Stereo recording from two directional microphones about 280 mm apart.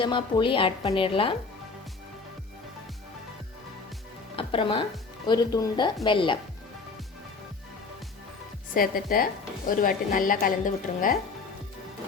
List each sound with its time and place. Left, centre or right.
0.0 s a woman's voice: centre
4.4 s speech: centre
8.7 s a woman's voice: left